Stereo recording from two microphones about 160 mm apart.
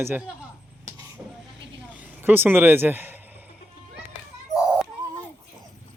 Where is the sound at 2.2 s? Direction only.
10° right (ahead or behind).